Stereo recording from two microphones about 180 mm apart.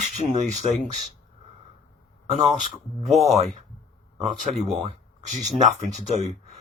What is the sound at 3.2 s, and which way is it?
Speech, 35° right (ahead or behind).